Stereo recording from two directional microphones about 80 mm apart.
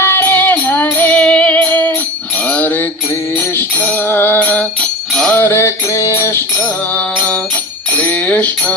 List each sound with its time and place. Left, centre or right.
0.0 s music: left
5.4 s mantra: left
6.9 s music: centre